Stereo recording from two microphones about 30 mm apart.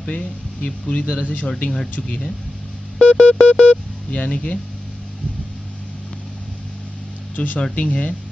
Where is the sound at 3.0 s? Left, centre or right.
Left.